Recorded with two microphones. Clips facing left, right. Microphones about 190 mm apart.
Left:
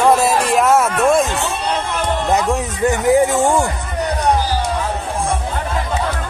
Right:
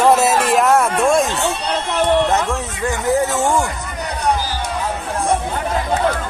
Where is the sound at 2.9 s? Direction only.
15° left (ahead or behind).